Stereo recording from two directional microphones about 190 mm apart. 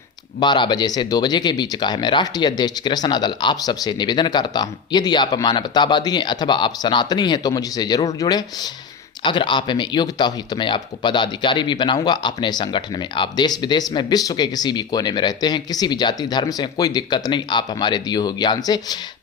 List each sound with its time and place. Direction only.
0.3 s speech: 25° left (ahead or behind)